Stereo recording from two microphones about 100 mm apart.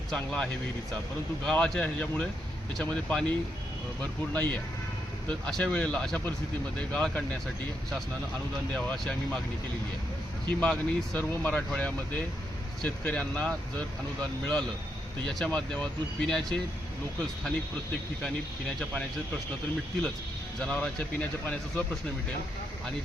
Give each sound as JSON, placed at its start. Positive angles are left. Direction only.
{"t": 0.1, "sound": "speech", "side_deg": 10}
{"t": 1.5, "sound": "speech", "side_deg": 10}
{"t": 5.3, "sound": "speech", "side_deg": 5}
{"t": 8.7, "sound": "speech", "side_deg": 10}
{"t": 10.6, "sound": "speech", "side_deg": 10}
{"t": 20.6, "sound": "speech", "side_deg": 10}